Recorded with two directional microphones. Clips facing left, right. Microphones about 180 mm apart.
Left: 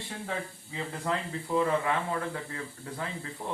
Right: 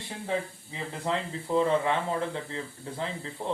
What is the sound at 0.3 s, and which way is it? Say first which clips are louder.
Speech: right 7 dB; 20° right (ahead or behind).